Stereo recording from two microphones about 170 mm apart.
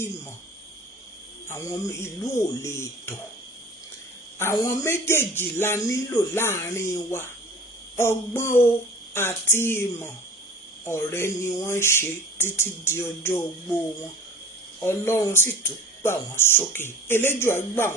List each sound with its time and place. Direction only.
1.5 s speech: 15° left (ahead or behind)
4.4 s speech: 20° left (ahead or behind)